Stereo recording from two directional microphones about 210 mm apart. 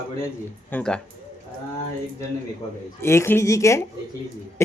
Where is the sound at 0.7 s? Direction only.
5° left (ahead or behind).